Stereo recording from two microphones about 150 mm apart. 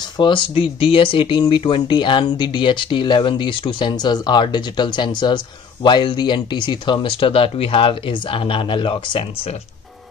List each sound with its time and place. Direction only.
0.2 s speech: 35° left (ahead or behind)